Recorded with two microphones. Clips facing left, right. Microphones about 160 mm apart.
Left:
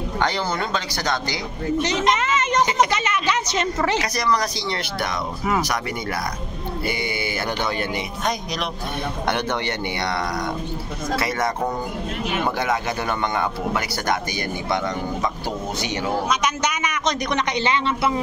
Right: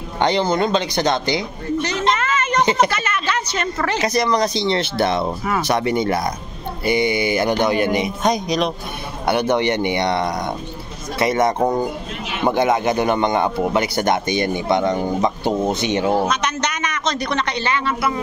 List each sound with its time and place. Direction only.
0.2 s speech: 20° right (ahead or behind)
2.1 s a sound: 20° left (ahead or behind)
2.9 s a woman's voice: 15° left (ahead or behind)
4.0 s speech: 25° right (ahead or behind)
16.3 s a man's voice: 10° left (ahead or behind)